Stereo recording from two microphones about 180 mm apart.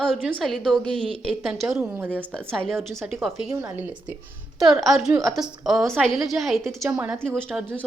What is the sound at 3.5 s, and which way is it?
Speech, 20° right (ahead or behind).